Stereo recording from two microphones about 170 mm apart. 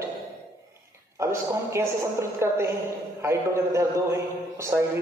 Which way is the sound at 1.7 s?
15° right (ahead or behind).